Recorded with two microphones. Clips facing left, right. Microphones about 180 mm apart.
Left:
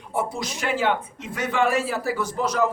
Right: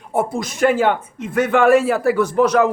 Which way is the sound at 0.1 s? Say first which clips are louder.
Right 6 dB; 50° right (ahead or behind).